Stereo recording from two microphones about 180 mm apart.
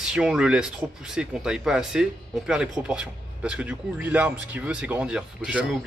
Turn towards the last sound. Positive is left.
turn(degrees=-5)  # may be behind; listen again after turning